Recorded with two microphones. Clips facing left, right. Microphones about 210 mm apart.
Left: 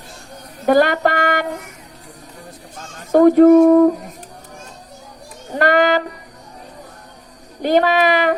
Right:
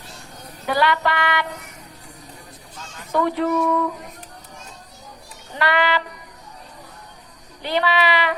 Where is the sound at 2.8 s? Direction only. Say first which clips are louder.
Left 10 dB; 45° left (ahead or behind).